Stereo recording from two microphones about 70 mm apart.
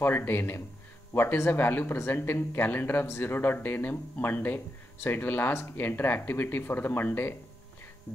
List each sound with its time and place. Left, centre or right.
0.0 s speech: left